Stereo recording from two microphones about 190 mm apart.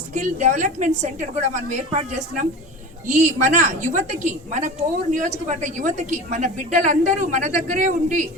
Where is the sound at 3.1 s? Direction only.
40° right (ahead or behind).